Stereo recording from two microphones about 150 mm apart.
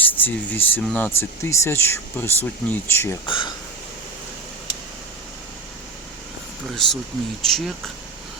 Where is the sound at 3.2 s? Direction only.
35° left (ahead or behind).